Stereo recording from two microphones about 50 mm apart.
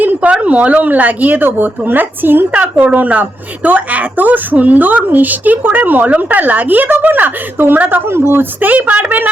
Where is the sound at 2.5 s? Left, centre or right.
Right.